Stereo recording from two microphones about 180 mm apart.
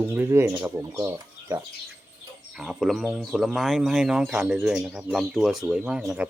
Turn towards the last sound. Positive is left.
turn(degrees=-5)  # may be behind; listen again after turning